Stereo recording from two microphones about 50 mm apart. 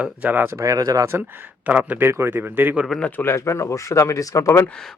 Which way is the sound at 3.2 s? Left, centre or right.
Left.